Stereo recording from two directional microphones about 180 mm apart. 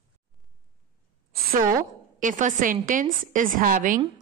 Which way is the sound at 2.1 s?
45° right (ahead or behind).